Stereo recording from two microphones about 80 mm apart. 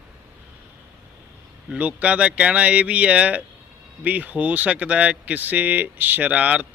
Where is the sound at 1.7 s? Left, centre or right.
Centre.